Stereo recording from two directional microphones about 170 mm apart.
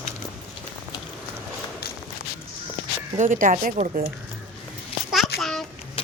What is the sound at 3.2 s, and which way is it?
Speech, 50° right (ahead or behind).